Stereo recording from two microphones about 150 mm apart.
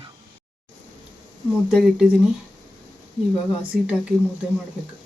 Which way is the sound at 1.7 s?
5° right (ahead or behind).